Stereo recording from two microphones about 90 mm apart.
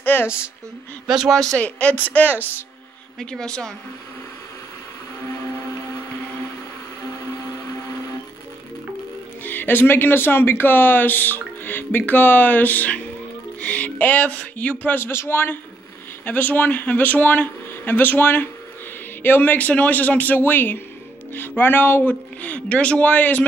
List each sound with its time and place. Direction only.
0.0 s speech: 20° left (ahead or behind)
1.0 s speech: 5° right (ahead or behind)
1.5 s speech: 15° left (ahead or behind)
3.2 s speech: 10° left (ahead or behind)
9.4 s speech: 20° left (ahead or behind)